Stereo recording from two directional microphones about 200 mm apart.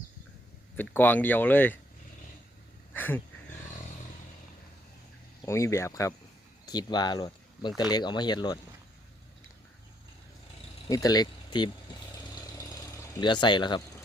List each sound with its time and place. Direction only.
0.8 s speech: 10° left (ahead or behind)
2.9 s dog: 10° left (ahead or behind)
5.5 s speech: 15° left (ahead or behind)
10.8 s a sound: 20° left (ahead or behind)